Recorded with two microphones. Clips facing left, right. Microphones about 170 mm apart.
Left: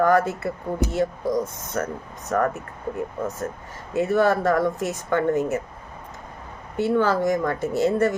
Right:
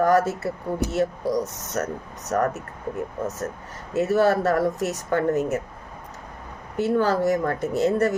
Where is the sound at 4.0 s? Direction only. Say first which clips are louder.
Even; 40° right (ahead or behind).